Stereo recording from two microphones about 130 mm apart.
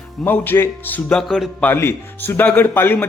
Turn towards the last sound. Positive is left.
turn(degrees=15)  # may be behind; listen again after turning